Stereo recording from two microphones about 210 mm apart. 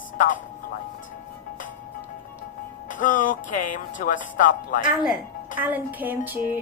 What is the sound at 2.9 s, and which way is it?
Speech, 40° left (ahead or behind).